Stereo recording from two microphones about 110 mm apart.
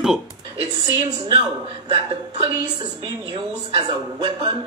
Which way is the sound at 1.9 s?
55° right (ahead or behind).